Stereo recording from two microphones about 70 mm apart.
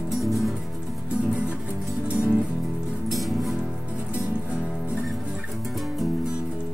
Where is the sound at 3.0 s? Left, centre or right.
Centre.